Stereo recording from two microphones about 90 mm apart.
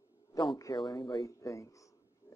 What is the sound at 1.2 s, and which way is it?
Speech, 35° left (ahead or behind).